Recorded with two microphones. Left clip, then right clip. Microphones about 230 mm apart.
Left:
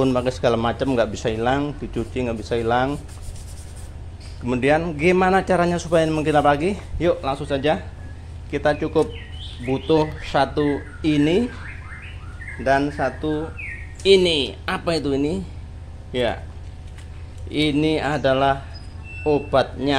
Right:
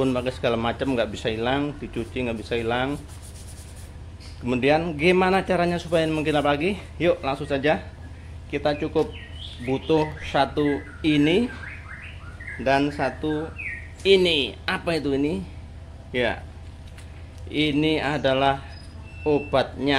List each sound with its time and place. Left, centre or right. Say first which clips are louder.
0.0 s speech: left 4 dB; centre
4.5 s a man's voice: left 2 dB; centre
12.6 s a man's voice: left 2 dB; centre
17.5 s a man's voice: left 2 dB; centre